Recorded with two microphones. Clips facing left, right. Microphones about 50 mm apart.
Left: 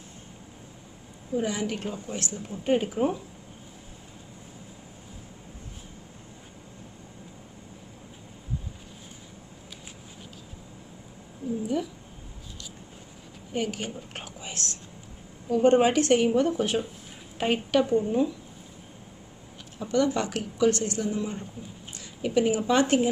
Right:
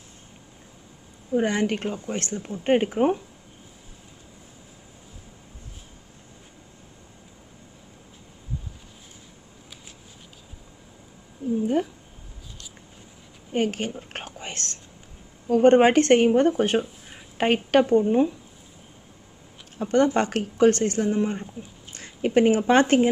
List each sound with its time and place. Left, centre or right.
1.3 s speech: right
11.6 s cat: right
13.5 s a woman's voice: right
19.8 s speech: right